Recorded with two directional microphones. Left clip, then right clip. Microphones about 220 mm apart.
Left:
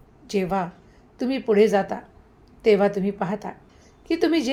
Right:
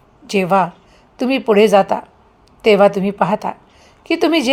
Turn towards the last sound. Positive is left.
turn(degrees=-30)  # may be behind; listen again after turning